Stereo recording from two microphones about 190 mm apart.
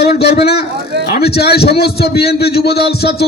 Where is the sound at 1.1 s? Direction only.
55° left (ahead or behind).